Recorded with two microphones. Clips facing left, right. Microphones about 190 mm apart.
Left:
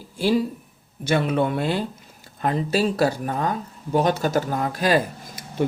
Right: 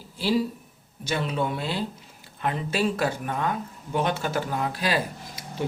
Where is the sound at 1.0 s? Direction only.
55° left (ahead or behind).